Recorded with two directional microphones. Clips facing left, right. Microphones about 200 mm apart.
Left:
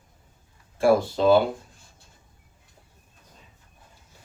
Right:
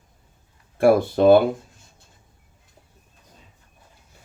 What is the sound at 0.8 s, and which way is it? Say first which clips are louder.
Speech: right 4 dB; 55° right (ahead or behind).